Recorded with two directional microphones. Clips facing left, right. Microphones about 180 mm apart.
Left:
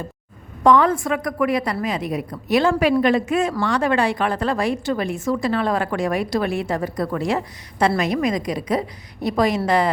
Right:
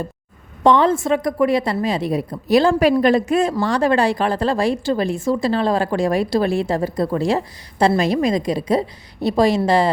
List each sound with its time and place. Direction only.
0.6 s a woman's voice: 25° right (ahead or behind)